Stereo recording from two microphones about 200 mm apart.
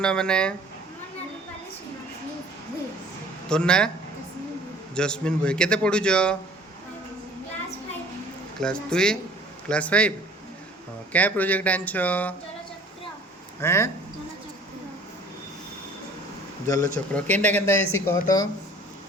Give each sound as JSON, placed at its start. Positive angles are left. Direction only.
{"t": 0.0, "sound": "a man's voice", "side_deg": 5}
{"t": 3.5, "sound": "a man's voice", "side_deg": 5}
{"t": 4.9, "sound": "a man's voice", "side_deg": 5}
{"t": 8.6, "sound": "a man's voice", "side_deg": 5}
{"t": 11.1, "sound": "speech", "side_deg": 10}
{"t": 13.6, "sound": "speech", "side_deg": 15}
{"t": 16.6, "sound": "speech", "side_deg": 15}